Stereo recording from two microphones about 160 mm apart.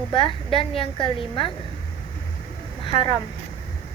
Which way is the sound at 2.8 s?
30° left (ahead or behind).